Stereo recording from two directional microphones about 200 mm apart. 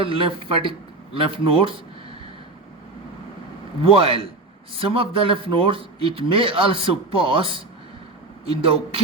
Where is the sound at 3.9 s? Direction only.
25° right (ahead or behind).